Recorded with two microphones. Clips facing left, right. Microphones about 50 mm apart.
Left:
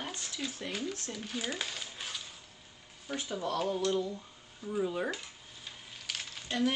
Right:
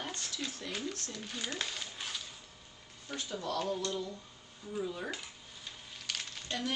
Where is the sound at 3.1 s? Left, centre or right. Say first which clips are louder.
Left 3 dB; centre.